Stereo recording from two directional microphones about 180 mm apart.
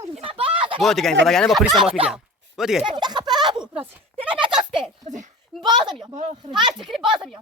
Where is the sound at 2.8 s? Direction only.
25° right (ahead or behind).